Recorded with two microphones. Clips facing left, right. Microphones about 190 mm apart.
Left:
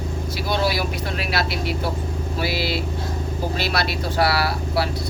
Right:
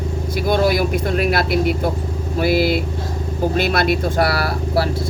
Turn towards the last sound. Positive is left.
turn(degrees=-45)  # may be behind; listen again after turning